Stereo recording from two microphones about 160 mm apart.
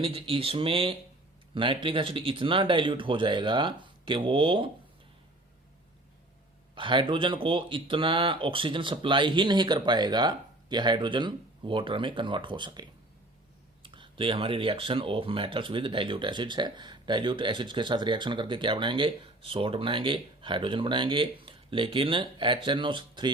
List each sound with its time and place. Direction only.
0.0 s speech: 35° right (ahead or behind)
6.7 s speech: 30° right (ahead or behind)
13.8 s speech: 30° right (ahead or behind)